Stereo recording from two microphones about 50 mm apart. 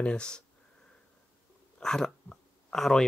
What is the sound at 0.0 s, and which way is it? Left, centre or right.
Speech, centre.